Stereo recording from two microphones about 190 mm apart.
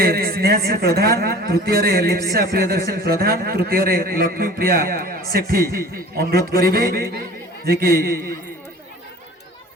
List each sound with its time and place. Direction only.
0.0 s speech: 50° right (ahead or behind)